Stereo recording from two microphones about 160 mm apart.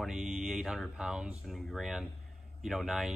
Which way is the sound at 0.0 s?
5° right (ahead or behind).